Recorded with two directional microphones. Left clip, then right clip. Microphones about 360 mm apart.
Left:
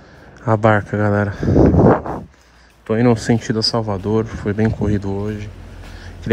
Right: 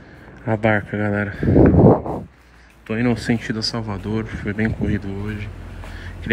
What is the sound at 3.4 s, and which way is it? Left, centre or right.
Speech, centre.